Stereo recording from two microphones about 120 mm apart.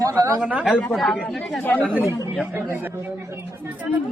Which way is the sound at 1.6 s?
15° left (ahead or behind).